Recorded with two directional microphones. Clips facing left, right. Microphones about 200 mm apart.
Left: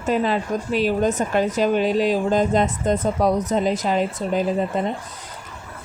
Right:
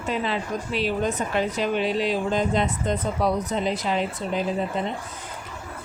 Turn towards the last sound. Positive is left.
turn(degrees=45)  # may be behind; listen again after turning